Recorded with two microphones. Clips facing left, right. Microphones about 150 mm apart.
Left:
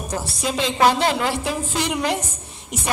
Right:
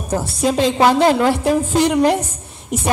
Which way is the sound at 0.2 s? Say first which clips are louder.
Right 8 dB; 45° right (ahead or behind).